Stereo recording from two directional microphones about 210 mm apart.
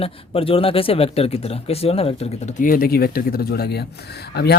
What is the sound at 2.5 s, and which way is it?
Speech, 45° left (ahead or behind).